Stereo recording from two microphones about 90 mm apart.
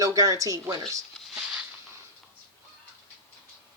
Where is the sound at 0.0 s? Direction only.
40° right (ahead or behind).